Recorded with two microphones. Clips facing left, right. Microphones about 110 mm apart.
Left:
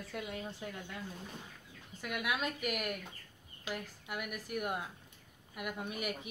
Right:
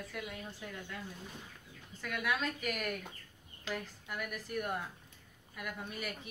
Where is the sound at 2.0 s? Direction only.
15° left (ahead or behind).